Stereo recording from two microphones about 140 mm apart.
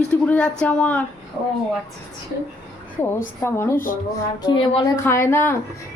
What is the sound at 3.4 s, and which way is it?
Speech, 15° left (ahead or behind).